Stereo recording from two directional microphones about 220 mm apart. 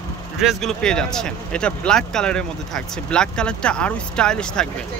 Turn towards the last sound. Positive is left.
turn(degrees=5)  # may be behind; listen again after turning